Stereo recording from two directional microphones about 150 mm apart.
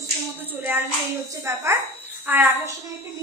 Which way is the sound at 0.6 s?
15° right (ahead or behind).